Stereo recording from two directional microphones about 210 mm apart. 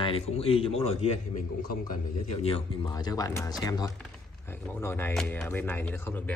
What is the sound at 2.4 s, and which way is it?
Speech, 25° left (ahead or behind).